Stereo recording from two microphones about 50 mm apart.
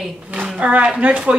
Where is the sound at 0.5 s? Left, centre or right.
Right.